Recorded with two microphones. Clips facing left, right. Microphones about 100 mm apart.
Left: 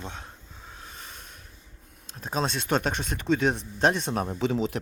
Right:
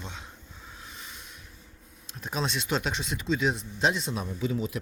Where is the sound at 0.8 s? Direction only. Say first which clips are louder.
Left 1 dB; 45° left (ahead or behind).